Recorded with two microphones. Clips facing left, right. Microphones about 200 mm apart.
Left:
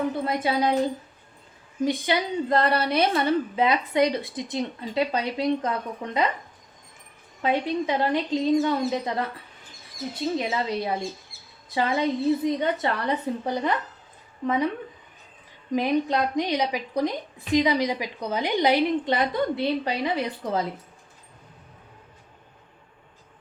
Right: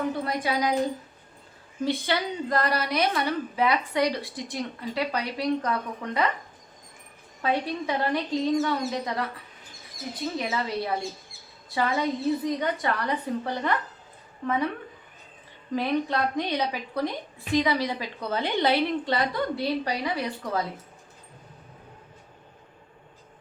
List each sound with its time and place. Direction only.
0.3 s a woman's voice: 25° left (ahead or behind)
1.8 s a woman's voice: 15° left (ahead or behind)
7.4 s a woman's voice: 20° left (ahead or behind)
10.3 s a woman's voice: 20° left (ahead or behind)
15.7 s a woman's voice: 15° left (ahead or behind)